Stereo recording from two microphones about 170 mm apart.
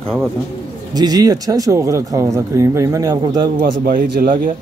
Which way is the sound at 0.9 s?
20° right (ahead or behind).